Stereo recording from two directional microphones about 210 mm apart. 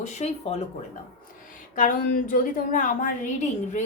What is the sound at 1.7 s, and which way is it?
A woman's voice, 40° left (ahead or behind).